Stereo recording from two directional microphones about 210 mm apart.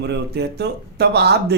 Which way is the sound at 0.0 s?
50° right (ahead or behind).